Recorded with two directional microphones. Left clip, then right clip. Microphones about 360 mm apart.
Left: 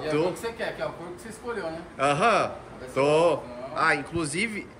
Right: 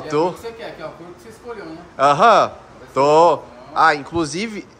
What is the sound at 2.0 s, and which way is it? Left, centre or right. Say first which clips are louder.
A man's voice: right 10 dB; centre.